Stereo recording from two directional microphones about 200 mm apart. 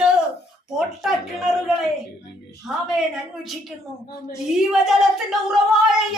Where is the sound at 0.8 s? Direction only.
Centre (ahead or behind).